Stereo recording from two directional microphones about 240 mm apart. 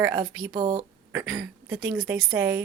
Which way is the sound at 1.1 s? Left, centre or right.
Centre.